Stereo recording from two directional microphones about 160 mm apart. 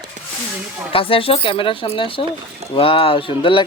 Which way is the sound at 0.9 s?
35° left (ahead or behind).